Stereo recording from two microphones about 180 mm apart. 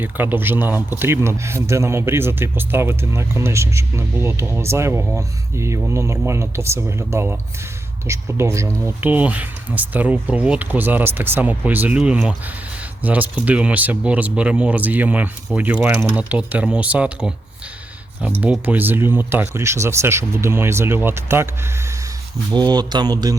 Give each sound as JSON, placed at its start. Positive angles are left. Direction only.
{"t": 0.0, "sound": "speech", "side_deg": -10}
{"t": 22.5, "sound": "speech", "side_deg": -25}